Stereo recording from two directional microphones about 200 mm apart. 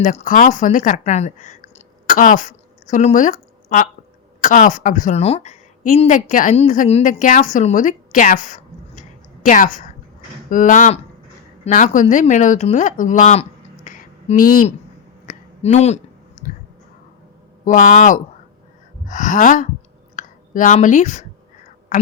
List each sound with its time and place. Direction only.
0.0 s a woman's voice: 35° left (ahead or behind)
15.3 s a sound: 35° left (ahead or behind)
17.7 s speech: 40° left (ahead or behind)